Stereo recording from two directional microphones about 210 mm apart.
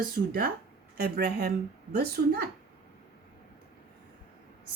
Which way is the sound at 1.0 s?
50° right (ahead or behind).